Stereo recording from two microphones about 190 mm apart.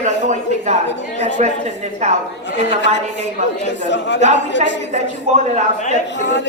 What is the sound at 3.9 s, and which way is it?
Speech, 65° left (ahead or behind).